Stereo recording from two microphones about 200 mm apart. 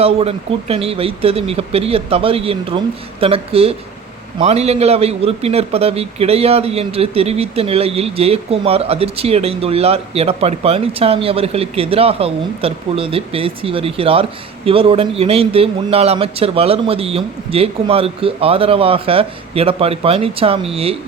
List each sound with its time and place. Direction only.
0.0 s a man's voice: 30° right (ahead or behind)